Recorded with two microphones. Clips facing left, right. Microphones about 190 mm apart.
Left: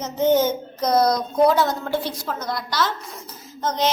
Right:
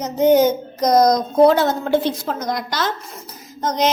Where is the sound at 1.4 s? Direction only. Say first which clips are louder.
Right 3 dB; 25° right (ahead or behind).